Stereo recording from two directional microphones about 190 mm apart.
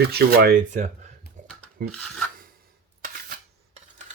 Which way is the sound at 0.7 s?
40° right (ahead or behind).